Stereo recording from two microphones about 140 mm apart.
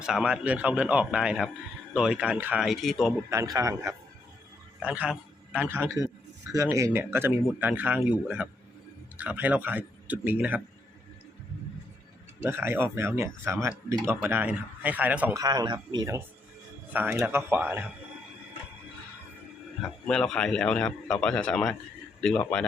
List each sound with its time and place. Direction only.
0.0 s speech: 5° right (ahead or behind)
3.2 s a man's voice: 25° right (ahead or behind)
4.8 s a man's voice: 10° right (ahead or behind)
12.4 s speech: 15° right (ahead or behind)
15.4 s speech: 25° right (ahead or behind)
16.9 s speech: 15° right (ahead or behind)
20.1 s speech: 5° left (ahead or behind)